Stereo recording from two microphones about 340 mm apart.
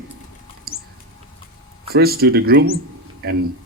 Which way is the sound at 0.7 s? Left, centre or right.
Right.